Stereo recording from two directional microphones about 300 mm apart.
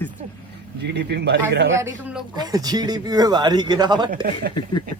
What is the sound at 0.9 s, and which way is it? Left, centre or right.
Speech, right.